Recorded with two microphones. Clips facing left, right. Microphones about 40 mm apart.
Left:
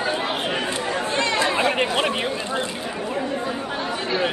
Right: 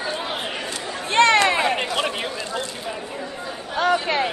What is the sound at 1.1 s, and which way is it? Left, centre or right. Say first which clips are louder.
Chatter: right 8 dB; right.